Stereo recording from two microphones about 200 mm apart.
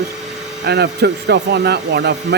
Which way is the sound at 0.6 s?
55° right (ahead or behind).